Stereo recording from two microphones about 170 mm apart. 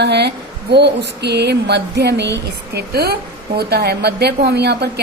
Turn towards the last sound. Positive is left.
turn(degrees=-75)  # may be behind; listen again after turning